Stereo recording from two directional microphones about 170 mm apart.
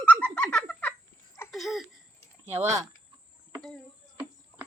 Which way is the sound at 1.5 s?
Centre (ahead or behind).